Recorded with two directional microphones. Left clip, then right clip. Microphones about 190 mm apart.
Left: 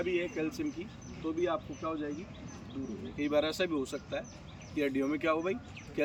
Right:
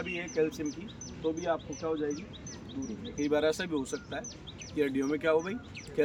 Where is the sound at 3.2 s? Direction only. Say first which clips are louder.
Right 2 dB; 15° right (ahead or behind).